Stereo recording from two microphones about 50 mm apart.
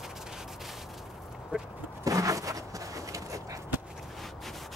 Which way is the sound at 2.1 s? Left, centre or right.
Right.